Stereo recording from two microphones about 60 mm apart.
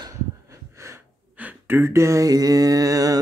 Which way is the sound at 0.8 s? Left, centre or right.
Right.